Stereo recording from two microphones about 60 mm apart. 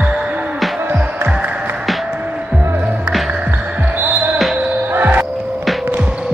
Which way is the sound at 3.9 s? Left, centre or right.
Right.